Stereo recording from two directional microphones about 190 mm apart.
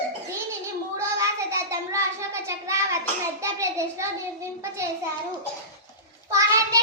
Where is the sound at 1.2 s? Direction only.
15° right (ahead or behind).